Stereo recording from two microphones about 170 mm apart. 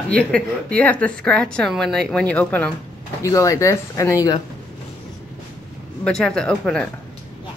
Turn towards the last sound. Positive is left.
turn(degrees=5)  # may be behind; listen again after turning